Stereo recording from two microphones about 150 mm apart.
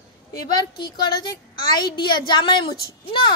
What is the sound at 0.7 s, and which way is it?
A woman's voice, 30° left (ahead or behind).